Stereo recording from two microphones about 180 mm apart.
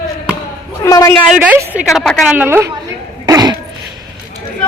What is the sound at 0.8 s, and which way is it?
Speech, 20° left (ahead or behind).